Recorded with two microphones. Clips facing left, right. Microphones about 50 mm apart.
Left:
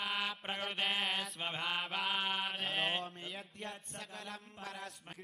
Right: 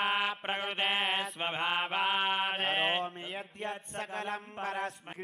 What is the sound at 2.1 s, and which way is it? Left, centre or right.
Speech, right.